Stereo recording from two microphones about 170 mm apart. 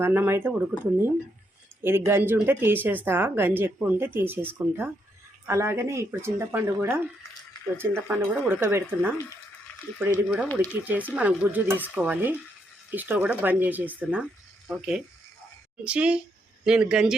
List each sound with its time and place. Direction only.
0.0 s speech: 15° right (ahead or behind)
1.8 s speech: 15° right (ahead or behind)